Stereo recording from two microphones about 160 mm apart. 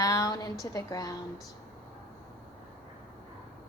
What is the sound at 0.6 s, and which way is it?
Speech, 20° left (ahead or behind).